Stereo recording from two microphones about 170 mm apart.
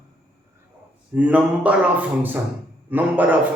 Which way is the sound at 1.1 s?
10° right (ahead or behind).